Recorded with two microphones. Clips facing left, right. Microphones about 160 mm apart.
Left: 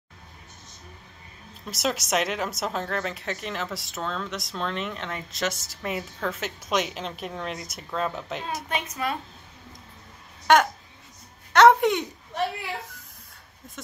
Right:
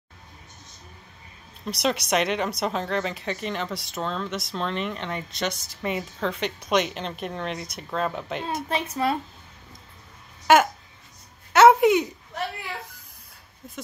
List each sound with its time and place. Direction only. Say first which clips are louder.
1.7 s speech: right 2 dB; centre (ahead or behind)
8.6 s a woman's voice: right 5 dB; 30° right (ahead or behind)
10.4 s a sound: right 1 dB; 5° right (ahead or behind)